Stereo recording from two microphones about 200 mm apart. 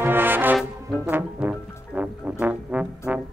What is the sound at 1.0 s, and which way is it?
Brass instrument, 10° right (ahead or behind).